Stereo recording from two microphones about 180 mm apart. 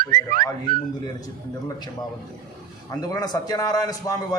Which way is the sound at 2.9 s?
20° left (ahead or behind).